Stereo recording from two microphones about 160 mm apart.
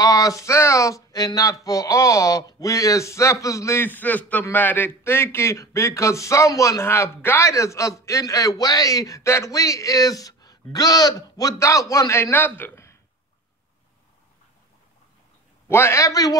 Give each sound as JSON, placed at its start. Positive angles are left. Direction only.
{"t": 0.0, "sound": "speech", "side_deg": 20}
{"t": 15.7, "sound": "speech", "side_deg": 15}